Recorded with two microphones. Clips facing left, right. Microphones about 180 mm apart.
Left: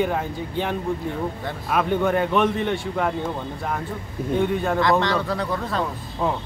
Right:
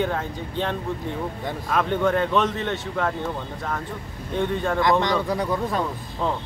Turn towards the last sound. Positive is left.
turn(degrees=5)  # may be behind; listen again after turning